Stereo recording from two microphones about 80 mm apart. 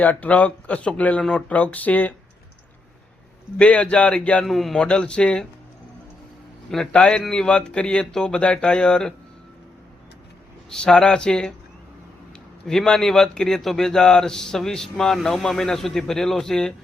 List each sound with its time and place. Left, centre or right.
0.0 s a man's voice: centre
3.6 s a man's voice: centre
4.4 s a man's voice: centre
6.9 s a man's voice: centre
10.7 s a man's voice: centre
12.6 s a man's voice: centre